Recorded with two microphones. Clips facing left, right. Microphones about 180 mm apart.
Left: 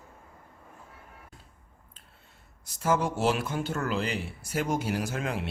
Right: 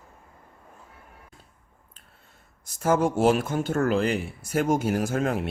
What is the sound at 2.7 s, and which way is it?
Speech, 50° right (ahead or behind).